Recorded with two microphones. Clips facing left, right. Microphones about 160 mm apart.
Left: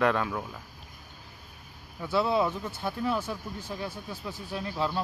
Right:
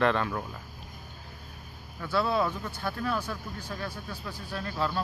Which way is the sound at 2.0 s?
20° left (ahead or behind).